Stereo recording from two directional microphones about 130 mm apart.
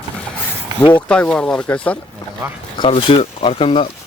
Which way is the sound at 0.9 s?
10° left (ahead or behind).